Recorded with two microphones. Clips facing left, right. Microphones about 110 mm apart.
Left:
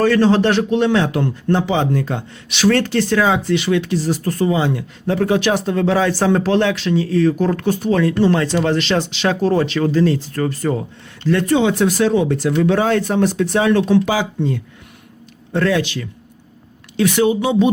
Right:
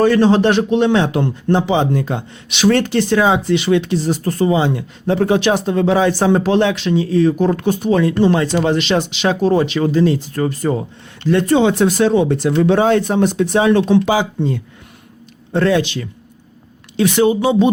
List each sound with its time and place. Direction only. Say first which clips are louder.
0.0 s speech: right 2 dB; 20° right (ahead or behind)